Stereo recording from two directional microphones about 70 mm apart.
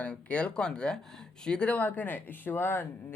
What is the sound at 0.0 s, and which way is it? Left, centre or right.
Speech, centre.